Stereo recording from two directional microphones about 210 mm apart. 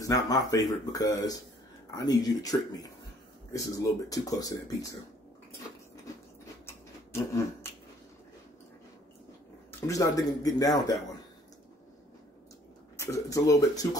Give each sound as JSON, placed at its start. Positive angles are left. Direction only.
{"t": 0.0, "sound": "speech", "side_deg": 15}
{"t": 9.7, "sound": "speech", "side_deg": 15}
{"t": 12.9, "sound": "speech", "side_deg": 15}